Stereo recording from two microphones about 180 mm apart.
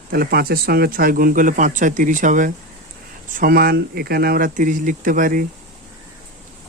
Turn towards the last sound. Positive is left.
turn(degrees=-50)  # may be behind; listen again after turning